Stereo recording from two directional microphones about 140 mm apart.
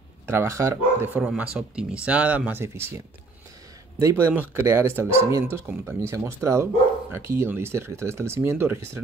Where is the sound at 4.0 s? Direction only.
20° right (ahead or behind).